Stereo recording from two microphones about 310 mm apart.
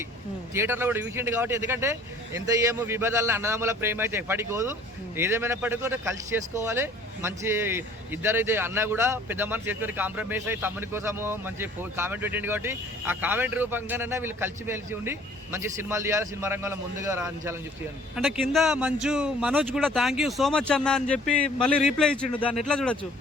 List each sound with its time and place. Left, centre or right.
0.5 s speech: centre